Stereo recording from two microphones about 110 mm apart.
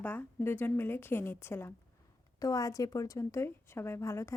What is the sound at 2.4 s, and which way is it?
A woman's voice, 30° left (ahead or behind).